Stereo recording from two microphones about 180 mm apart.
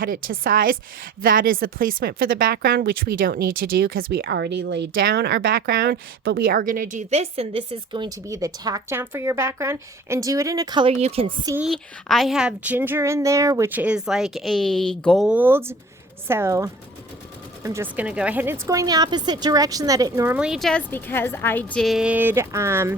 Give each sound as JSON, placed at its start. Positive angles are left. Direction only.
{"t": 0.0, "sound": "a woman's voice", "side_deg": -50}
{"t": 11.5, "sound": "a woman's voice", "side_deg": 0}